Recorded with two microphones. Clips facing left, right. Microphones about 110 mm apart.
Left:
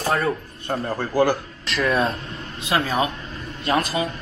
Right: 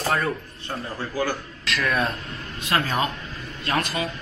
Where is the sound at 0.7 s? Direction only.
50° left (ahead or behind).